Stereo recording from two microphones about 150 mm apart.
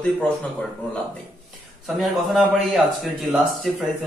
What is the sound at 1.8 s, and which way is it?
Speech, centre (ahead or behind).